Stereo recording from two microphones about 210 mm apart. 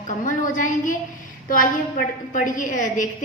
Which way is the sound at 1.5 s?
40° left (ahead or behind).